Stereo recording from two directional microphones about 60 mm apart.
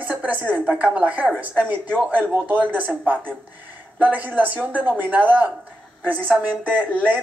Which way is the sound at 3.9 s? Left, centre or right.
Right.